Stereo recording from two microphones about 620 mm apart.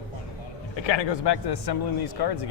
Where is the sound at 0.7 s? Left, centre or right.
Left.